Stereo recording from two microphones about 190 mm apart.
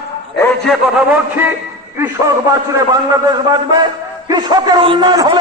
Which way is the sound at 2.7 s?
20° right (ahead or behind).